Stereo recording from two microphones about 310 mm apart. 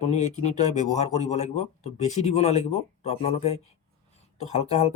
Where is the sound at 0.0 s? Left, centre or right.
Left.